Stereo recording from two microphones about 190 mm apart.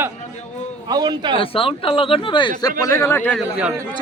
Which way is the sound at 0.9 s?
20° right (ahead or behind).